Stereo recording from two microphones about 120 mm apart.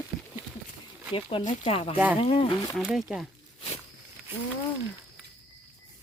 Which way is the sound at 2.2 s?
55° left (ahead or behind).